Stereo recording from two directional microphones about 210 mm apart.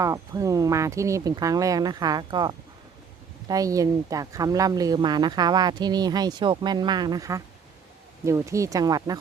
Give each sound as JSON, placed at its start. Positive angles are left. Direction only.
{"t": 0.0, "sound": "speech", "side_deg": -15}